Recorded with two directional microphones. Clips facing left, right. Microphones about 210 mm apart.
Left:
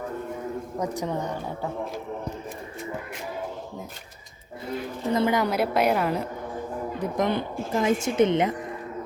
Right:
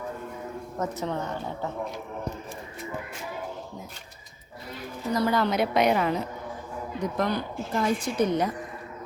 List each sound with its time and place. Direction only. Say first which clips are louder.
0.8 s a woman's voice: left 1 dB; 15° left (ahead or behind)
5.1 s a woman's voice: left 1 dB; 20° left (ahead or behind)
5.5 s a woman's voice: even; 5° left (ahead or behind)
7.2 s a woman's voice: left 3 dB; 20° left (ahead or behind)